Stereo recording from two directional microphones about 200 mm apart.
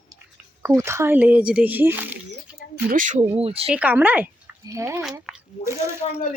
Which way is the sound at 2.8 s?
45° right (ahead or behind).